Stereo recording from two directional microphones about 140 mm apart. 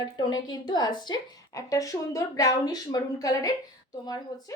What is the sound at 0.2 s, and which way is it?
A woman's voice, 30° left (ahead or behind).